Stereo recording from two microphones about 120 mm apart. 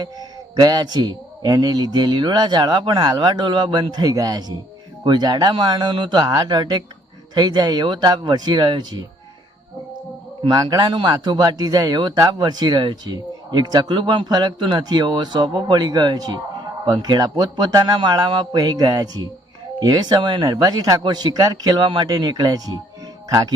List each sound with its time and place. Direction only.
0.0 s a man's voice: 35° right (ahead or behind)
10.4 s a man's voice: 35° right (ahead or behind)